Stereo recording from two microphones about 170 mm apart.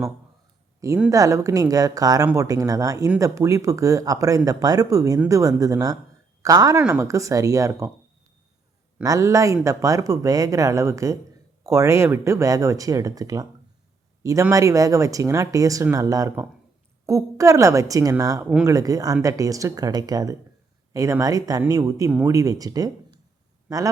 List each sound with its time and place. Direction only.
1.1 s speech: 20° right (ahead or behind)
9.0 s a man's voice: 20° right (ahead or behind)